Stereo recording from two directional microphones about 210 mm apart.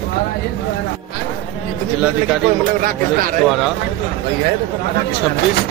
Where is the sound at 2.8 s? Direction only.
40° right (ahead or behind).